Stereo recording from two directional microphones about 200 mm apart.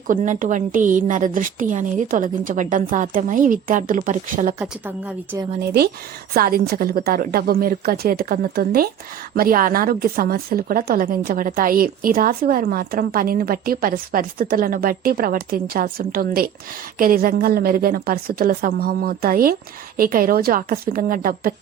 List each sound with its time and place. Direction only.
0.1 s a woman's voice: 40° right (ahead or behind)
4.6 s a woman's voice: 10° right (ahead or behind)
5.5 s speech: 55° right (ahead or behind)